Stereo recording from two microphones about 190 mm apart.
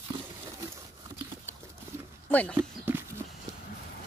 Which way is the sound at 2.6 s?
10° right (ahead or behind).